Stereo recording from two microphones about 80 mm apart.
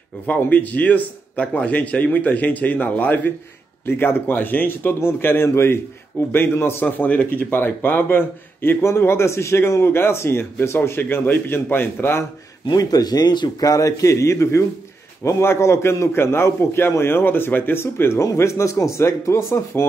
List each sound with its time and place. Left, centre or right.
0.3 s speech: left
12.6 s a man's voice: left